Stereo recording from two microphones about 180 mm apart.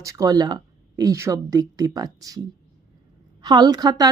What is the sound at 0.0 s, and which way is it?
Speech, 20° right (ahead or behind).